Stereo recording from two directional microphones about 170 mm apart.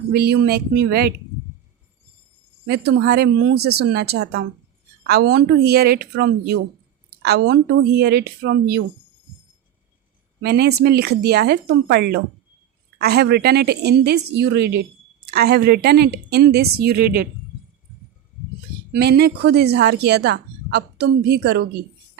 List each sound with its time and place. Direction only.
0.1 s a woman's voice: 70° right (ahead or behind)
2.6 s a woman's voice: 70° right (ahead or behind)
10.4 s a woman's voice: 70° right (ahead or behind)
18.9 s a woman's voice: 75° right (ahead or behind)